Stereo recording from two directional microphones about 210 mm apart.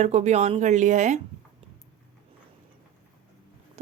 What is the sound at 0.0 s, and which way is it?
A woman's voice, 30° right (ahead or behind).